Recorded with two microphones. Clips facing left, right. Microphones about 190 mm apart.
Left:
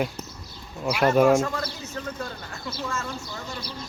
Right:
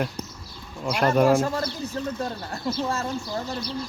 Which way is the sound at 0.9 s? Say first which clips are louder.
Left 1 dB; 5° left (ahead or behind).